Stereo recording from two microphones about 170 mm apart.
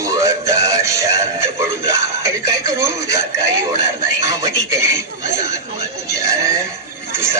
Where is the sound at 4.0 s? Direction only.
20° right (ahead or behind).